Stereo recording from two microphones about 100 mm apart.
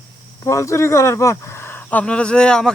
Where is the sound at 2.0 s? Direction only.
10° left (ahead or behind).